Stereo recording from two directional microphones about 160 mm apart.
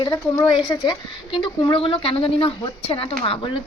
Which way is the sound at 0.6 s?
25° left (ahead or behind).